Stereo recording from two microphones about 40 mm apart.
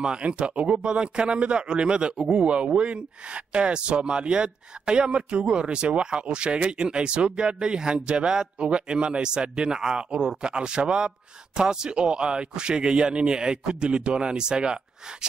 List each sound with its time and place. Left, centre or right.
0.0 s speech: right